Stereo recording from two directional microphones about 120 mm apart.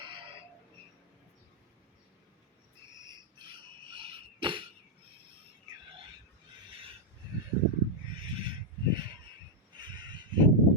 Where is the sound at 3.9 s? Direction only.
45° right (ahead or behind).